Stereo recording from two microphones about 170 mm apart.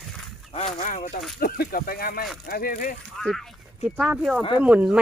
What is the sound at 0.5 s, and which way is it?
Speech, 45° left (ahead or behind).